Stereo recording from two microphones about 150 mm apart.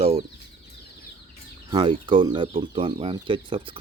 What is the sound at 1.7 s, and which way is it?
Speech, 30° right (ahead or behind).